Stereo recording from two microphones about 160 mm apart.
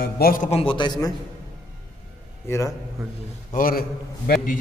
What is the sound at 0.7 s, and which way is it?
Speech, 30° left (ahead or behind).